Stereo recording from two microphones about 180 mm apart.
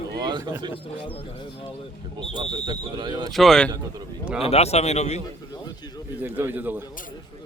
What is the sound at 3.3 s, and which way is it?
Speech, centre (ahead or behind).